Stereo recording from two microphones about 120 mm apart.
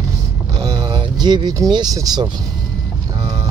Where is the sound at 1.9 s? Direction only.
35° right (ahead or behind).